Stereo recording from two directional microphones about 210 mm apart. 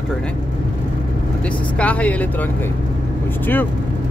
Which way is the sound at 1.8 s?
5° left (ahead or behind).